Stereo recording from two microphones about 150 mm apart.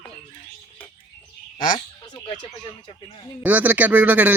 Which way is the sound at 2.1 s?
25° left (ahead or behind).